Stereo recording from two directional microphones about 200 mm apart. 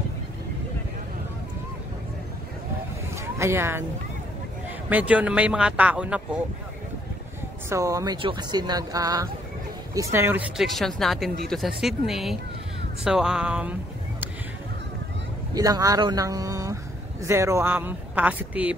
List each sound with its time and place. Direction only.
3.3 s speech: 15° right (ahead or behind)
4.8 s speech: 5° right (ahead or behind)
7.7 s speech: 15° right (ahead or behind)
15.5 s speech: 20° right (ahead or behind)